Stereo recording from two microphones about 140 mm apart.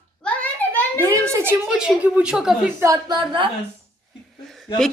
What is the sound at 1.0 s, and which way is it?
Speech, 20° right (ahead or behind).